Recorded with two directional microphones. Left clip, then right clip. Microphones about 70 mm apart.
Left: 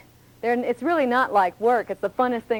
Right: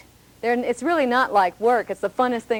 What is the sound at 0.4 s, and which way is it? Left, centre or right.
Speech, right.